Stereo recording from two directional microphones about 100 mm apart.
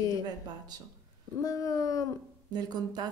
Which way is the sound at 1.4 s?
35° left (ahead or behind).